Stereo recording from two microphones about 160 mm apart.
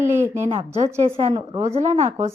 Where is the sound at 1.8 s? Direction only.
45° right (ahead or behind).